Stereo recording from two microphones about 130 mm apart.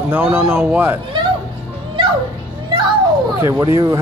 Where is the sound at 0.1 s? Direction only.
15° right (ahead or behind).